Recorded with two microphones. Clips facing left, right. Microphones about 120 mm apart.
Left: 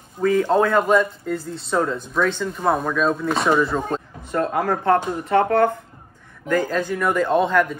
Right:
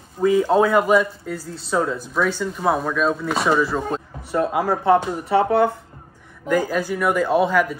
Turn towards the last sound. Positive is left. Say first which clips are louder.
# even
turn(degrees=-5)  # may be behind; listen again after turning